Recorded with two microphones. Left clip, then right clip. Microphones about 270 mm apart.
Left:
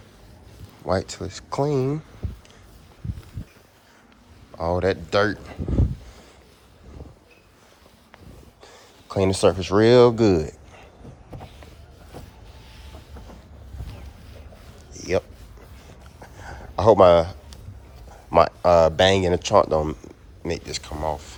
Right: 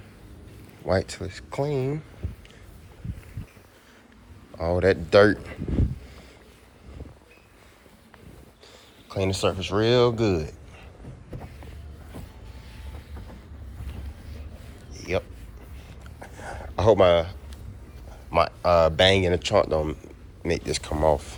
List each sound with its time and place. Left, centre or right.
0.9 s speech: centre
4.5 s speech: centre
9.0 s speech: left
16.3 s a sound: centre
16.7 s speech: centre